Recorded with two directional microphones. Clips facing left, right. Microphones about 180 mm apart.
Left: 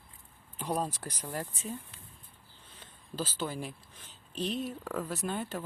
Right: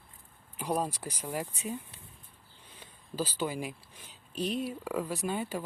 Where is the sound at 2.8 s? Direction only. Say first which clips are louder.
Right 3 dB; 10° right (ahead or behind).